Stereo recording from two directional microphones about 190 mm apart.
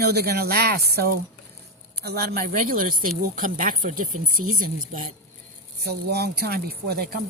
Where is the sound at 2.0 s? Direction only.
55° right (ahead or behind).